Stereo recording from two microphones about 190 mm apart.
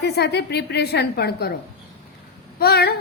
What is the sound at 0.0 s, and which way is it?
A woman's voice, 60° left (ahead or behind).